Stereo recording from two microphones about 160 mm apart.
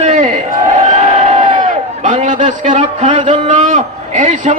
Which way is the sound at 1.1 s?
45° right (ahead or behind).